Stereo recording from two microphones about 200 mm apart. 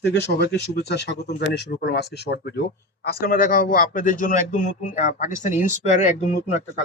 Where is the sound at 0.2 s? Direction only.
60° left (ahead or behind); by 6.6 s 30° left (ahead or behind).